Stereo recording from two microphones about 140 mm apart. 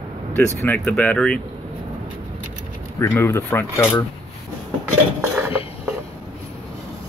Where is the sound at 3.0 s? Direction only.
20° left (ahead or behind).